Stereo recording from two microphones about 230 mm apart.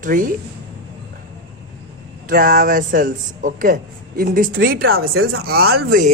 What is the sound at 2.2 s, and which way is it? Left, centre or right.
Speech, right.